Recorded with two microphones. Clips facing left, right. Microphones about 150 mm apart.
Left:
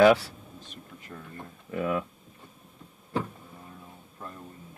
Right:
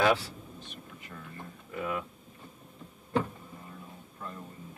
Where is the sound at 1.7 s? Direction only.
60° left (ahead or behind).